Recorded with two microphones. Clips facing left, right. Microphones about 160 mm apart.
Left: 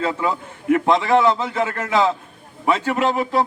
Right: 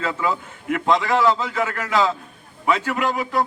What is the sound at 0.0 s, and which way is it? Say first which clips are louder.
A man's voice: left 2 dB; 25° left (ahead or behind).